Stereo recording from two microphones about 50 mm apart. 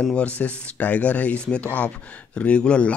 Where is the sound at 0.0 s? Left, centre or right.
Left.